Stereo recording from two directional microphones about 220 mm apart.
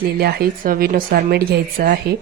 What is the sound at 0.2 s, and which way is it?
Speech, 45° right (ahead or behind).